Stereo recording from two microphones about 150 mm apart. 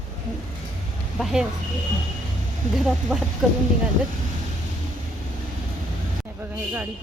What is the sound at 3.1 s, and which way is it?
Speech, 5° left (ahead or behind).